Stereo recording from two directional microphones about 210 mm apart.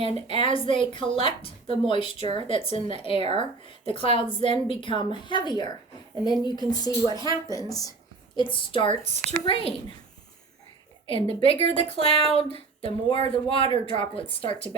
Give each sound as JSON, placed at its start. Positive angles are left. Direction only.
{"t": 0.4, "sound": "a woman's voice", "side_deg": 25}
{"t": 11.0, "sound": "speech", "side_deg": 25}